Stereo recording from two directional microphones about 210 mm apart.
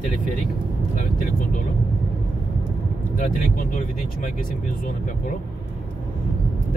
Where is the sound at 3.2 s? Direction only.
40° left (ahead or behind).